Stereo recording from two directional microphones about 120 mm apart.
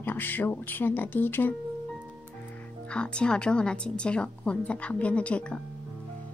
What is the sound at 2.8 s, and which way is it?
A woman's voice, 10° left (ahead or behind).